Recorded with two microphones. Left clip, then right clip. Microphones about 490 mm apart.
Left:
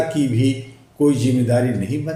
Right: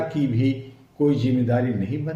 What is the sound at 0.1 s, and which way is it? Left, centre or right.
A man's voice, right.